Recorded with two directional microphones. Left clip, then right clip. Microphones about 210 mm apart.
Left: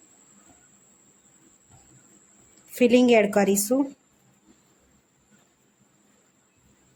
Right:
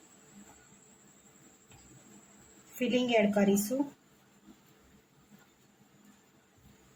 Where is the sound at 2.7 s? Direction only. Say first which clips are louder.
Left 10 dB; 55° left (ahead or behind).